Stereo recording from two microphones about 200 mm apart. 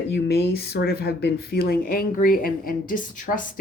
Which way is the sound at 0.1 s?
55° left (ahead or behind).